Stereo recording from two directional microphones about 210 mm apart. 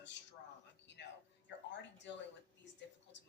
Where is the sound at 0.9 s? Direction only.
55° left (ahead or behind).